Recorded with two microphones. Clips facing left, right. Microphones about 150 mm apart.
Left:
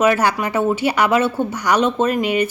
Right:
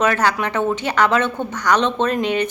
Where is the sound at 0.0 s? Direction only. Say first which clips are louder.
Left 2 dB; 10° left (ahead or behind).